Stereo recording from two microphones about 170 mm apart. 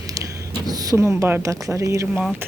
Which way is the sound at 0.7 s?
20° right (ahead or behind).